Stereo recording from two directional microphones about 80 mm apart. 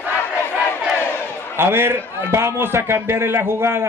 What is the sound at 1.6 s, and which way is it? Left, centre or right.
A man's voice, right.